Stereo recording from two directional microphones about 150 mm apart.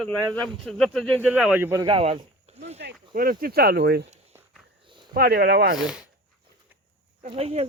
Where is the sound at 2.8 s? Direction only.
65° right (ahead or behind); by 4.0 s 90° right.